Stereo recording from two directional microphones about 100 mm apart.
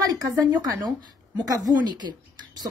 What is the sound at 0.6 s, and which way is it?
Speech, 40° right (ahead or behind).